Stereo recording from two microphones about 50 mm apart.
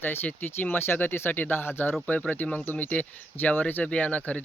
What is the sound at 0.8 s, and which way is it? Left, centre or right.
Speech, left.